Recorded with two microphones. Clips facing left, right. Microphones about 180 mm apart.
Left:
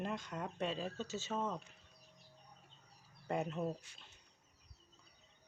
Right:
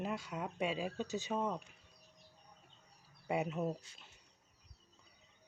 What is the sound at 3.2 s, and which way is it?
Speech, 10° right (ahead or behind).